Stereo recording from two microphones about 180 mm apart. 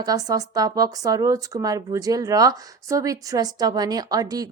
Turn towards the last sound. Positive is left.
turn(degrees=-20)  # may be behind; listen again after turning